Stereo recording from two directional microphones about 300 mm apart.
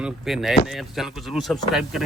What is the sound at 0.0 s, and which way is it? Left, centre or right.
A man's voice, centre.